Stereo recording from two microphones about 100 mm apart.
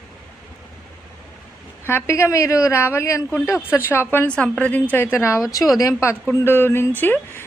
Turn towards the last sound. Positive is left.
turn(degrees=20)  # may be behind; listen again after turning